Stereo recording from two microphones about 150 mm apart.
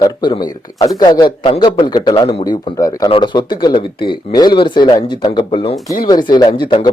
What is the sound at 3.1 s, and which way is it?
Speech, 35° left (ahead or behind).